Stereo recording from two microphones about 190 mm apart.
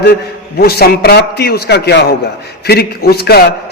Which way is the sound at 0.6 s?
55° left (ahead or behind).